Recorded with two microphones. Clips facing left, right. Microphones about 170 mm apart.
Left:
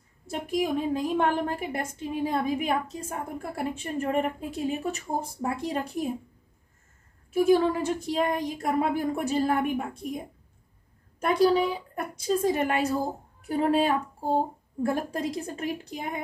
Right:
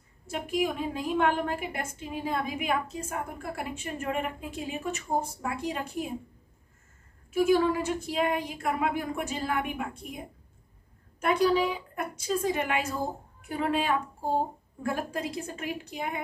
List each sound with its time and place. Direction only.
0.3 s a woman's voice: 35° left (ahead or behind)
7.3 s a woman's voice: 35° left (ahead or behind)
11.1 s a woman's voice: 40° left (ahead or behind)